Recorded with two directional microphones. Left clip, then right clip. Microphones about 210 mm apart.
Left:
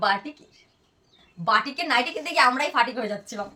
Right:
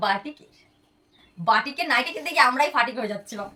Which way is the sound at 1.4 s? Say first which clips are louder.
Right 1 dB; 10° left (ahead or behind).